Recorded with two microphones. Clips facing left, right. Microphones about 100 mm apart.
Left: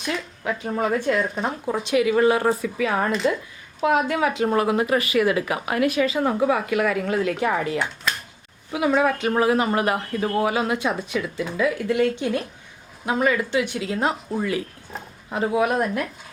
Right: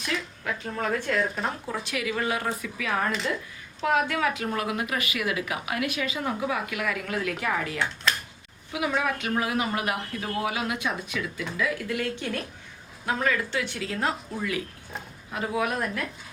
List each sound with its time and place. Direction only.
0.0 s speech: 20° left (ahead or behind)
14.3 s speech: 35° left (ahead or behind)